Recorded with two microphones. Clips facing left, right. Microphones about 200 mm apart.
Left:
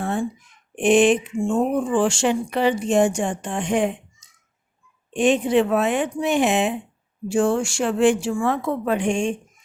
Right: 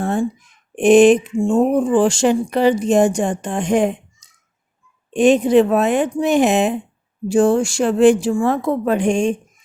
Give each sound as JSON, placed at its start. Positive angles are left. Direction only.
{"t": 0.0, "sound": "a sound", "side_deg": -40}
{"t": 0.8, "sound": "speech", "side_deg": -40}
{"t": 5.1, "sound": "speech", "side_deg": -40}